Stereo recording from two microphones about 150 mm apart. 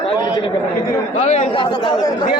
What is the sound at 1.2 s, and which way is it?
Speech, 50° left (ahead or behind).